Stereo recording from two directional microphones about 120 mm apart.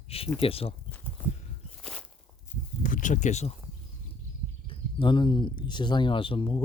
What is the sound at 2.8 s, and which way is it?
Speech, 90° left.